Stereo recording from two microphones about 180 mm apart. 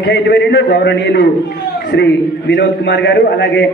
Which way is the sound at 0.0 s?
70° left (ahead or behind).